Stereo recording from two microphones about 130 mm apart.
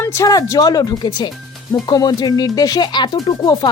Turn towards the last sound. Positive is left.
turn(degrees=35)  # may be behind; listen again after turning